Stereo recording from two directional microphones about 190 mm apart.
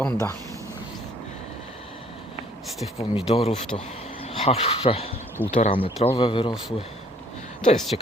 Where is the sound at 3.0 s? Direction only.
30° left (ahead or behind).